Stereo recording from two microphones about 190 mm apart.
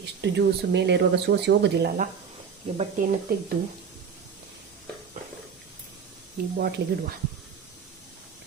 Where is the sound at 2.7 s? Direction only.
40° right (ahead or behind).